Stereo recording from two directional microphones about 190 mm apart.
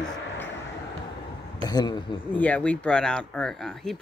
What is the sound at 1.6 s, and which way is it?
Speech, 20° left (ahead or behind).